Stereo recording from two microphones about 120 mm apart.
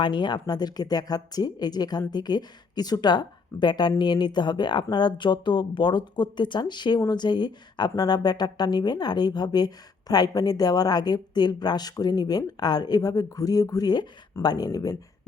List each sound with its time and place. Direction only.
0.0 s a woman's voice: 40° left (ahead or behind)